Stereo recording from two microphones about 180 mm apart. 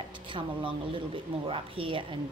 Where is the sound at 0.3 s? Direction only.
30° right (ahead or behind).